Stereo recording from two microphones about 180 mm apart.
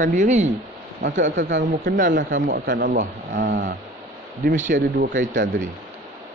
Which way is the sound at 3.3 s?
70° right (ahead or behind).